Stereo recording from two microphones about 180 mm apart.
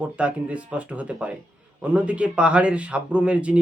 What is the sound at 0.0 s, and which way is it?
Speech, 5° right (ahead or behind).